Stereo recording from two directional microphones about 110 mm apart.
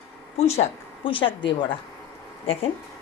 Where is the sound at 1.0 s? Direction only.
50° left (ahead or behind).